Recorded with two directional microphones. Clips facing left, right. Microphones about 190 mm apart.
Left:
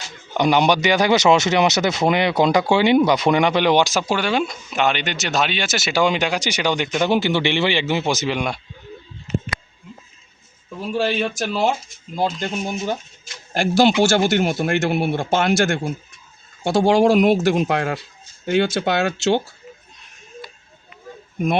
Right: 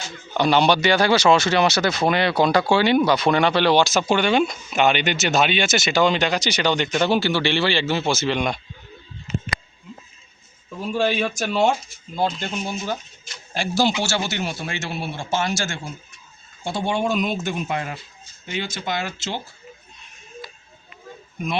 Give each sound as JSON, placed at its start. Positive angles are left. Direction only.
{"t": 0.3, "sound": "speech", "side_deg": 15}
{"t": 4.0, "sound": "speech", "side_deg": 0}
{"t": 10.9, "sound": "speech", "side_deg": 0}
{"t": 12.1, "sound": "speech", "side_deg": 15}
{"t": 13.5, "sound": "speech", "side_deg": 55}
{"t": 16.6, "sound": "speech", "side_deg": 90}
{"t": 21.3, "sound": "speech", "side_deg": 50}